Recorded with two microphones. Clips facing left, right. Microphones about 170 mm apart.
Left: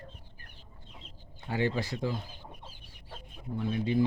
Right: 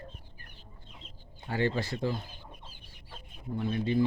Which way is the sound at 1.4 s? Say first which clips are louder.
Even; 10° left (ahead or behind).